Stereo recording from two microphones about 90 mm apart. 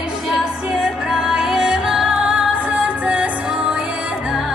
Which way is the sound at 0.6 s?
5° right (ahead or behind).